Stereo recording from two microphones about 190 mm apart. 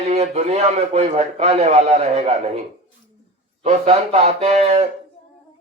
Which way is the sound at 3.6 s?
35° right (ahead or behind).